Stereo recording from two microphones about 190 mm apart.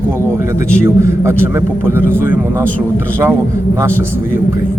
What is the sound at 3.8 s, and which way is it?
Speech, 10° right (ahead or behind).